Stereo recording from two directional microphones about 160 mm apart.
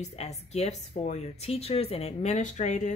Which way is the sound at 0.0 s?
45° left (ahead or behind).